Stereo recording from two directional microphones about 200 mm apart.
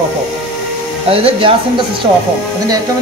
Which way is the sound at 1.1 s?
25° right (ahead or behind).